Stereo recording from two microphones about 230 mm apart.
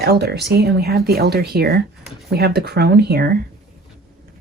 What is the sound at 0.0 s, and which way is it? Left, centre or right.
Speech, right.